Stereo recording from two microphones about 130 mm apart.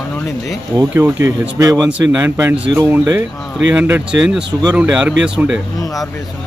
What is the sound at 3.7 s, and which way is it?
Speech, 15° right (ahead or behind).